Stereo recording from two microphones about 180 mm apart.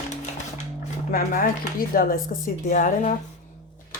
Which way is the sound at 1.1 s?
50° left (ahead or behind).